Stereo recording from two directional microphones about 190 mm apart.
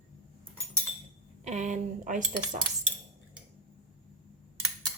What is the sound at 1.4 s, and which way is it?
Speech, 40° right (ahead or behind).